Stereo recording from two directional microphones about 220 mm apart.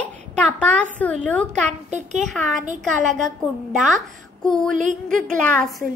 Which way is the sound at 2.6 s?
35° right (ahead or behind).